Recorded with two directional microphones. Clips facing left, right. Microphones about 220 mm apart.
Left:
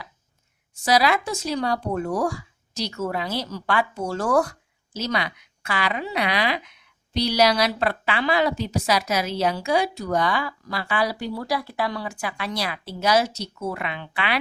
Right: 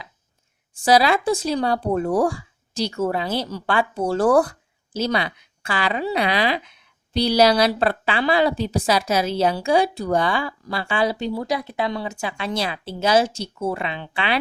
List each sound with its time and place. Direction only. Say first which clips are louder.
0.9 s speech: right 4 dB; 30° right (ahead or behind)